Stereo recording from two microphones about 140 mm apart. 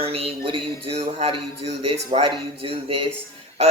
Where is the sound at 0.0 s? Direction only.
45° right (ahead or behind).